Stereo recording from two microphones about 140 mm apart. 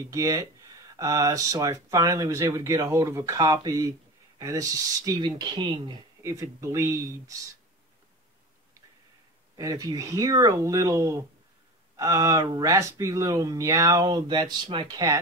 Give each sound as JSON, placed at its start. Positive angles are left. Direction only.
{"t": 0.1, "sound": "speech", "side_deg": -25}
{"t": 6.2, "sound": "speech", "side_deg": -20}
{"t": 9.6, "sound": "speech", "side_deg": -25}